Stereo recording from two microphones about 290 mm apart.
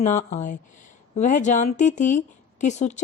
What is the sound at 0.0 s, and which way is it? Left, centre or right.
Speech, left.